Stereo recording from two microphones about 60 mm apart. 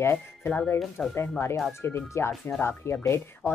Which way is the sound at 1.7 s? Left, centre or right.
Left.